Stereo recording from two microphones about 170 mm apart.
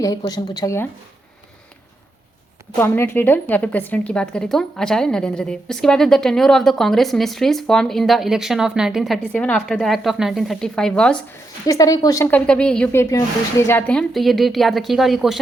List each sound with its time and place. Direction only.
0.0 s speech: 20° left (ahead or behind)
2.7 s a woman's voice: 15° left (ahead or behind)
11.6 s speech: 20° left (ahead or behind)
12.3 s a woman's voice: 5° left (ahead or behind)